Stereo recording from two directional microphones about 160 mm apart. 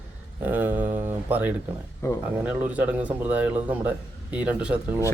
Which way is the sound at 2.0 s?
15° left (ahead or behind).